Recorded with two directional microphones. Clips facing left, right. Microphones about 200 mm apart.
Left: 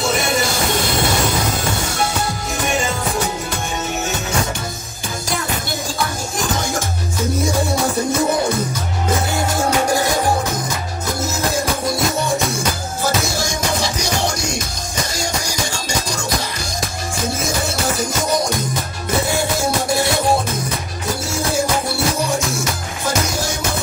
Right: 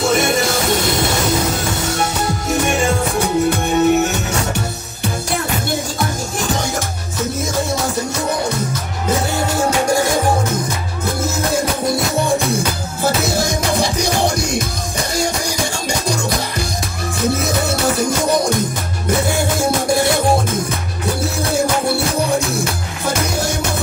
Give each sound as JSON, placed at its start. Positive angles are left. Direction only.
{"t": 3.4, "sound": "music", "side_deg": -60}
{"t": 13.0, "sound": "music", "side_deg": -60}
{"t": 17.3, "sound": "music", "side_deg": -60}